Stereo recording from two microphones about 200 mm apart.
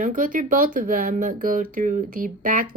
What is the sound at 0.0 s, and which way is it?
Speech, 40° right (ahead or behind).